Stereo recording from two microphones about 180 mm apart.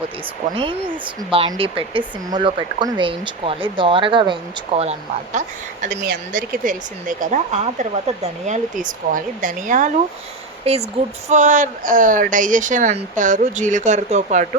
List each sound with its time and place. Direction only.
1.3 s speech: 30° right (ahead or behind)
5.8 s speech: 50° right (ahead or behind)
10.7 s speech: 35° right (ahead or behind)